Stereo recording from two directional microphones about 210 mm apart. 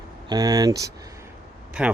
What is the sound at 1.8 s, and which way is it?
Speech, 5° right (ahead or behind).